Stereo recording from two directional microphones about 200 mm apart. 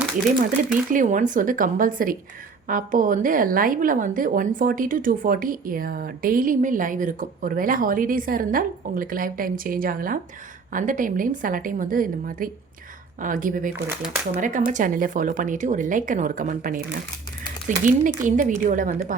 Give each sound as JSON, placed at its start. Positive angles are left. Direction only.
{"t": 0.9, "sound": "a woman's voice", "side_deg": -40}
{"t": 13.8, "sound": "speech", "side_deg": -5}
{"t": 14.4, "sound": "speech", "side_deg": -40}